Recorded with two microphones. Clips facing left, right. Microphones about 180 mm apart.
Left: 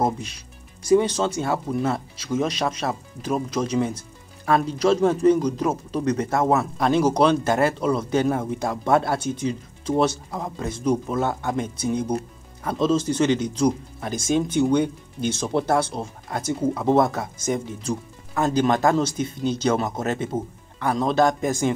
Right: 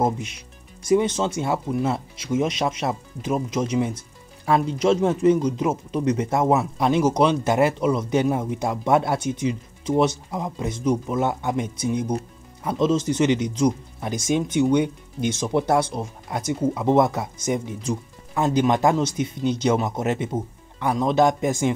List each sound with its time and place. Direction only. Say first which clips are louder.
0.9 s speech: left 1 dB; 20° right (ahead or behind)